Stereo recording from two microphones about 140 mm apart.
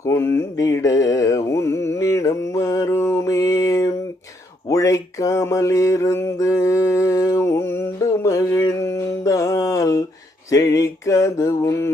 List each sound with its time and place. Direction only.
0.0 s mantra: 20° left (ahead or behind)
10.5 s music: 25° left (ahead or behind)